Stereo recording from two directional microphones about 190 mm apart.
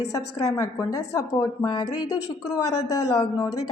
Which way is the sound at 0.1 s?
15° left (ahead or behind).